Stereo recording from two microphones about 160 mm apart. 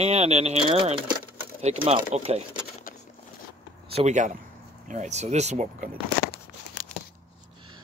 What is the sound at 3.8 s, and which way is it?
Speech, 40° right (ahead or behind).